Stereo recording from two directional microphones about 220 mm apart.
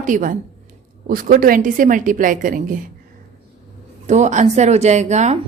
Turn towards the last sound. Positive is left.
turn(degrees=-30)  # may be behind; listen again after turning